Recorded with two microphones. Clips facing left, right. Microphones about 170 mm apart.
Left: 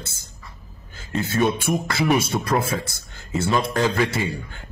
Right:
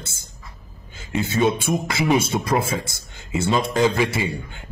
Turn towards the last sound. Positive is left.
turn(degrees=-20)  # may be behind; listen again after turning